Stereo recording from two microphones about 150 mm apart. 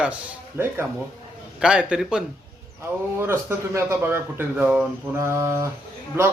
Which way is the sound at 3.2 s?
15° right (ahead or behind).